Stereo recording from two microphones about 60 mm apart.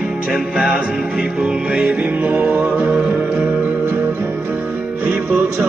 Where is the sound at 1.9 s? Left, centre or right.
Right.